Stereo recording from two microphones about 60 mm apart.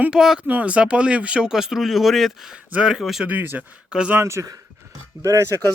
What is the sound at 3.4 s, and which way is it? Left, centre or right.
Speech, right.